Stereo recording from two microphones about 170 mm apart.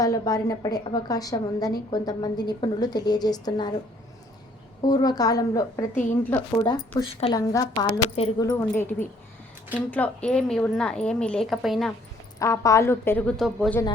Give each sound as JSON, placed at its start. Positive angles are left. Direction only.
{"t": 0.0, "sound": "a woman's voice", "side_deg": 20}
{"t": 4.8, "sound": "a woman's voice", "side_deg": 25}
{"t": 7.3, "sound": "a woman's voice", "side_deg": 20}
{"t": 12.4, "sound": "a woman's voice", "side_deg": 20}